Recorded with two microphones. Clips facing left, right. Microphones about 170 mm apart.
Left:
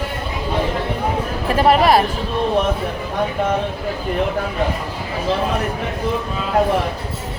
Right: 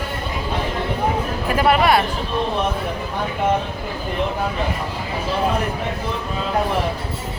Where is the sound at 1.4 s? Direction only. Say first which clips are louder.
Left 3 dB; 35° left (ahead or behind).